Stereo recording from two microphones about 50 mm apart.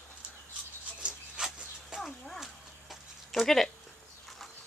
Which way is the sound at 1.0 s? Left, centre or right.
Centre.